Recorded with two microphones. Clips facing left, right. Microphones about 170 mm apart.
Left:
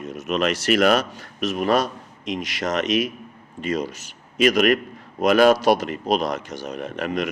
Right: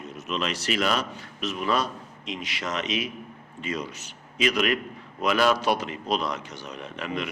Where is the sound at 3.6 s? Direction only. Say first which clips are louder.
Left 7 dB; 45° left (ahead or behind).